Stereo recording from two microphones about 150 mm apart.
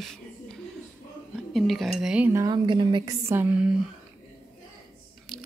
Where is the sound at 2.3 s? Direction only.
20° right (ahead or behind).